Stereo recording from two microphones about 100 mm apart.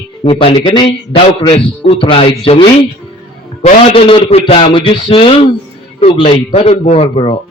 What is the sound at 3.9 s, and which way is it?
Speech, 65° left (ahead or behind).